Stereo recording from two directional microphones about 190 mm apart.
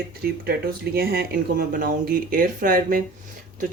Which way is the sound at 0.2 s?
50° right (ahead or behind).